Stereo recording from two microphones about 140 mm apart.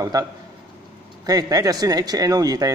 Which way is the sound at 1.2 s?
25° right (ahead or behind).